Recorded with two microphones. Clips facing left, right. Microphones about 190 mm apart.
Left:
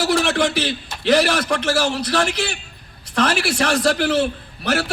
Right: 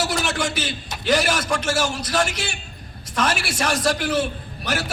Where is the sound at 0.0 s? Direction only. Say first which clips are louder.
Left 6 dB; 60° left (ahead or behind).